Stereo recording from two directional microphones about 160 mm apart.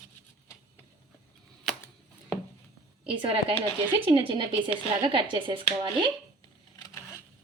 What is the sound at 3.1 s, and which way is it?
Speech, 30° right (ahead or behind).